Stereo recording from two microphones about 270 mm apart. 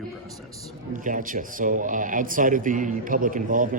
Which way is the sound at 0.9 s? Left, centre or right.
Right.